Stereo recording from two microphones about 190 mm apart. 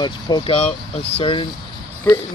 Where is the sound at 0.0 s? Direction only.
25° left (ahead or behind).